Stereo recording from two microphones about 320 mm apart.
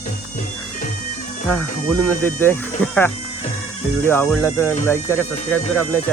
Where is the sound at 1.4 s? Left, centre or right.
Centre.